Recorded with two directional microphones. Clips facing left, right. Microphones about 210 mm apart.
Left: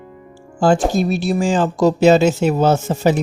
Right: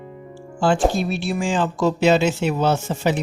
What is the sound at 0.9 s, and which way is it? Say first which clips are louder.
Speech: left 5 dB; 40° left (ahead or behind).